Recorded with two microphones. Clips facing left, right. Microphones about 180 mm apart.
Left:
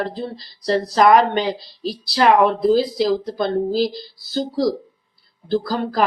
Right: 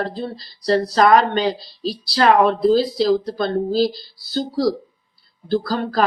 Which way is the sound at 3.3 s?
20° left (ahead or behind).